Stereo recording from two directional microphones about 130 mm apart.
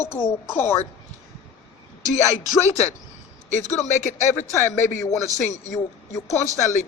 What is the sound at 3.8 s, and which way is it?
Speech, 65° left (ahead or behind).